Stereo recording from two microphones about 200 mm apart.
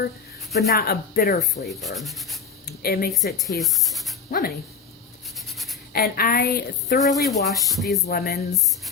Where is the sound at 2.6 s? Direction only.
50° left (ahead or behind).